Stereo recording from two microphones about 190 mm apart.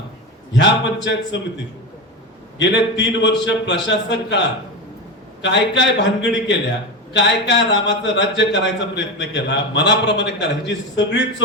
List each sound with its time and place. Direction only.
0.5 s speech: 70° left (ahead or behind)